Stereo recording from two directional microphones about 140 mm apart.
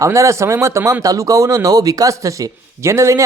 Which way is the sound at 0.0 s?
20° right (ahead or behind).